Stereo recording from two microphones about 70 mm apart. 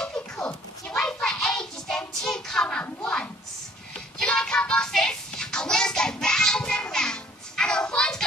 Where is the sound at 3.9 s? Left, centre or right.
Centre.